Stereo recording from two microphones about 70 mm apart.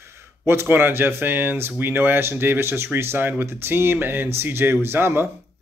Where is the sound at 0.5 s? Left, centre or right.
Right.